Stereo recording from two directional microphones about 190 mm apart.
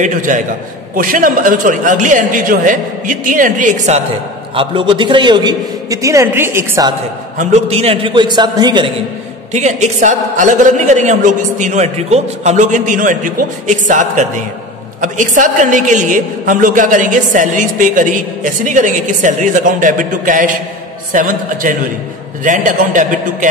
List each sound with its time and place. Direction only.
0.0 s a woman's voice: 40° right (ahead or behind)
4.6 s a man's voice: 25° right (ahead or behind)
7.3 s a man's voice: 35° right (ahead or behind)
9.5 s a man's voice: 40° right (ahead or behind)